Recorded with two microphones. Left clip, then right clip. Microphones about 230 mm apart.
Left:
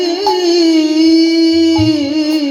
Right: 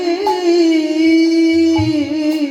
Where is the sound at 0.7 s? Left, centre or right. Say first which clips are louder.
Left 3 dB; left.